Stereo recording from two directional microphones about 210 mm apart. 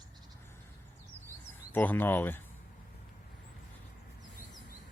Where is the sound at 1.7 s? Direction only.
10° left (ahead or behind).